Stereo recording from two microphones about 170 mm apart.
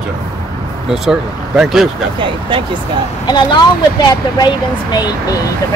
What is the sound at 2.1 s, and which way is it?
Speech, 30° right (ahead or behind).